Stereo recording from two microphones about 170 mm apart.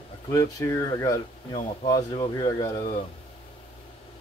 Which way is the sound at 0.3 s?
20° left (ahead or behind).